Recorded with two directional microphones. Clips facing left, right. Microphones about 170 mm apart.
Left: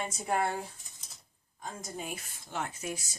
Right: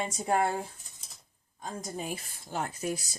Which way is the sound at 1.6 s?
35° right (ahead or behind).